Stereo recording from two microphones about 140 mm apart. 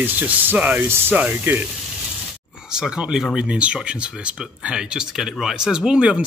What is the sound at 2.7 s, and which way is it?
Speech, 5° right (ahead or behind).